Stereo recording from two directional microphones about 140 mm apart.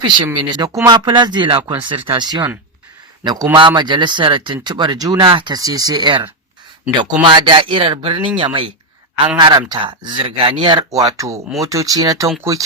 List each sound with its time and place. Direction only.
0.3 s speech: 30° right (ahead or behind)